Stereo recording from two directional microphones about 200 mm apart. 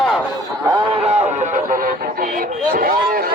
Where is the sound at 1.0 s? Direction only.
30° right (ahead or behind).